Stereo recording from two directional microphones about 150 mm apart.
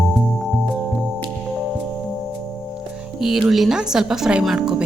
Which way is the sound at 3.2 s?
5° right (ahead or behind).